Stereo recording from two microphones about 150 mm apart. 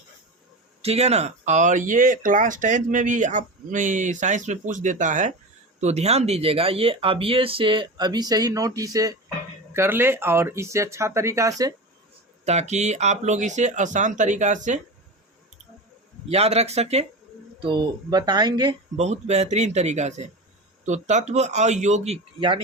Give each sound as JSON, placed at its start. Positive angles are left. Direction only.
{"t": 0.8, "sound": "speech", "side_deg": -45}
{"t": 5.8, "sound": "speech", "side_deg": -45}
{"t": 12.5, "sound": "speech", "side_deg": -50}
{"t": 16.3, "sound": "speech", "side_deg": -45}
{"t": 17.6, "sound": "speech", "side_deg": -30}
{"t": 18.9, "sound": "speech", "side_deg": -45}